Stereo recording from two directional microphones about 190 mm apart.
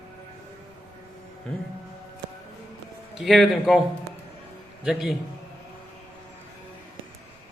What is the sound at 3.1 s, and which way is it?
Speech, centre (ahead or behind).